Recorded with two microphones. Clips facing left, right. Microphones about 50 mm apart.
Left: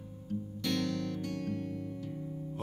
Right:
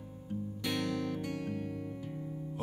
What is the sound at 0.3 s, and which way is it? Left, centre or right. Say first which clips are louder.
Music: left 2 dB; centre.